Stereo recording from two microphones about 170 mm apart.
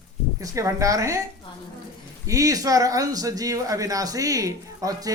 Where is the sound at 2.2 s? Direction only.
20° right (ahead or behind).